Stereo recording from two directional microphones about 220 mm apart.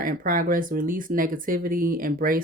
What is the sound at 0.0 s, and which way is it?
Speech, 40° right (ahead or behind).